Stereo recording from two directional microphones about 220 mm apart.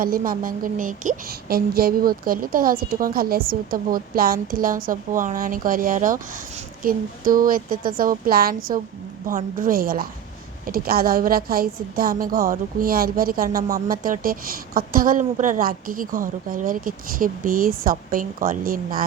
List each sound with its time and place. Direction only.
0.0 s a woman's voice: 40° right (ahead or behind)